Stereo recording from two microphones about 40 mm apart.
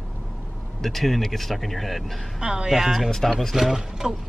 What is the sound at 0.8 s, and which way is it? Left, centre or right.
Speech, centre.